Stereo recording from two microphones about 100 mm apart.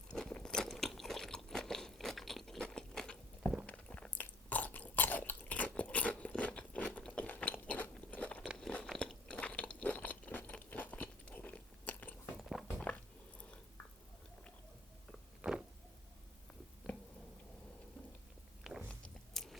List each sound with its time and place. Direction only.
0.1 s crunch: 10° left (ahead or behind)
3.7 s chewing: 10° left (ahead or behind)
8.5 s crunch: 5° left (ahead or behind)
12.4 s a sound: centre (ahead or behind)
15.4 s a sound: 5° right (ahead or behind)
18.7 s biting: 5° right (ahead or behind)